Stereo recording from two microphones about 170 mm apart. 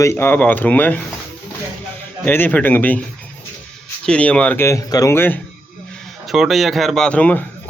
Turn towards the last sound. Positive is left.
turn(degrees=10)  # may be behind; listen again after turning